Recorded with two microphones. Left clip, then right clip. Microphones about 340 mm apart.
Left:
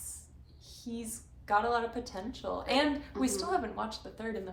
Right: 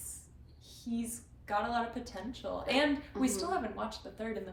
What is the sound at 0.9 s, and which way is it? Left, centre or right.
A woman's voice, centre.